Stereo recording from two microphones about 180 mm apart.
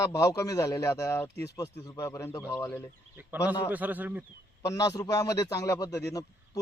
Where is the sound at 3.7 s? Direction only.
10° right (ahead or behind).